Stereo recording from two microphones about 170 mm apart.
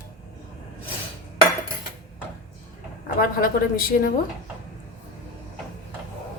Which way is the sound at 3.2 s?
55° left (ahead or behind).